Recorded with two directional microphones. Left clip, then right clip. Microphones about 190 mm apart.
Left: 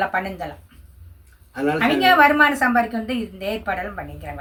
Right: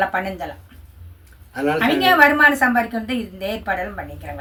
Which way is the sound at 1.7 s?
10° left (ahead or behind).